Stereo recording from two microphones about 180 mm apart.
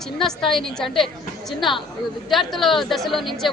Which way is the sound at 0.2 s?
Centre (ahead or behind).